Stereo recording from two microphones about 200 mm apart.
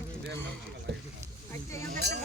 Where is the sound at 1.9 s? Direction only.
55° right (ahead or behind).